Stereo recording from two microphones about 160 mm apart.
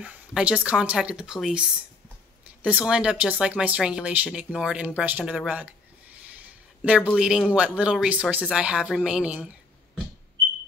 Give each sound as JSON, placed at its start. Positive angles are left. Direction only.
{"t": 0.0, "sound": "speech", "side_deg": -5}
{"t": 2.6, "sound": "speech", "side_deg": -5}
{"t": 6.8, "sound": "speech", "side_deg": -10}